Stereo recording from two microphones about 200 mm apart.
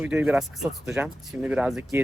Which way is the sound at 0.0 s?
5° right (ahead or behind).